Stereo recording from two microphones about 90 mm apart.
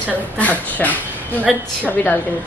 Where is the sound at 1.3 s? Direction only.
20° right (ahead or behind).